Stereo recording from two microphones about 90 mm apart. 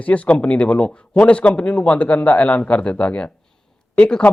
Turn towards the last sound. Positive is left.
turn(degrees=10)  # may be behind; listen again after turning